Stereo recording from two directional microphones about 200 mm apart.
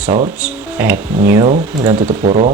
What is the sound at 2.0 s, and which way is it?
Speech, 30° right (ahead or behind).